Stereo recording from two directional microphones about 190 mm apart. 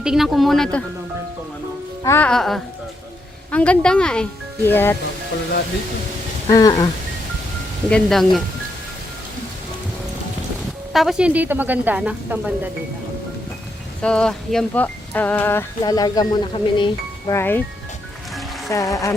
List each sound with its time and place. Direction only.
0.0 s speech: centre (ahead or behind)
2.0 s speech: 10° left (ahead or behind)
6.5 s speech: 20° left (ahead or behind)
7.9 s speech: 5° left (ahead or behind)
10.9 s a woman's voice: centre (ahead or behind)
14.0 s speech: 5° left (ahead or behind); by 17.3 s 25° left (ahead or behind)
17.3 s speech: 10° left (ahead or behind)
18.7 s speech: 15° left (ahead or behind)